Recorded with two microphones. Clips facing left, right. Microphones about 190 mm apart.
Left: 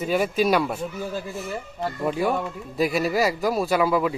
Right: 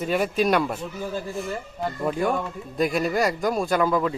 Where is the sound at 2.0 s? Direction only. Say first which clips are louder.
Left 1 dB; 5° left (ahead or behind).